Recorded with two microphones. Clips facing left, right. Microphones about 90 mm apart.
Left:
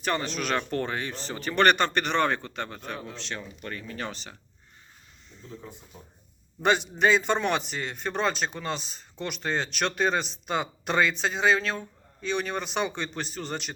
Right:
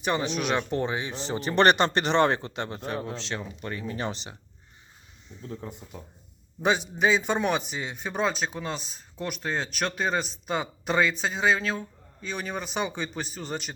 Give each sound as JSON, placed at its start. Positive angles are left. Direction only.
{"t": 0.0, "sound": "speech", "side_deg": -15}
{"t": 6.6, "sound": "speech", "side_deg": -5}